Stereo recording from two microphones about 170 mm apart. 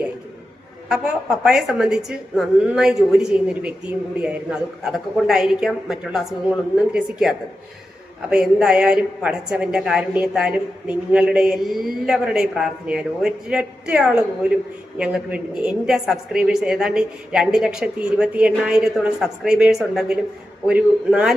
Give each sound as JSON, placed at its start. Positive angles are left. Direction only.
{"t": 0.9, "sound": "a woman's voice", "side_deg": -5}